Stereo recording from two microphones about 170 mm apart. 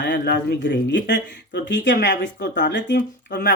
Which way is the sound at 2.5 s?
90° left.